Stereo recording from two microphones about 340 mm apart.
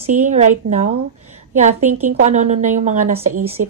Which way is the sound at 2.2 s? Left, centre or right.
Right.